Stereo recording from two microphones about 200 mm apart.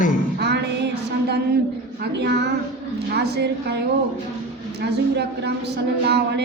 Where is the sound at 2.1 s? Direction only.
60° right (ahead or behind).